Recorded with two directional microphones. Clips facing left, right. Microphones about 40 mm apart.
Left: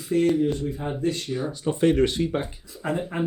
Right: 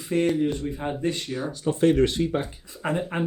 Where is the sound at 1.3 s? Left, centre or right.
Centre.